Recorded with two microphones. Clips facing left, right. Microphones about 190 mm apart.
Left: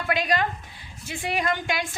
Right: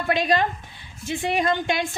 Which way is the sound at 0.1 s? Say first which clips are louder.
Right 3 dB; 25° right (ahead or behind).